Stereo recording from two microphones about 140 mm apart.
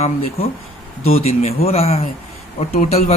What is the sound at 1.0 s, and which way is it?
Speech, 45° left (ahead or behind).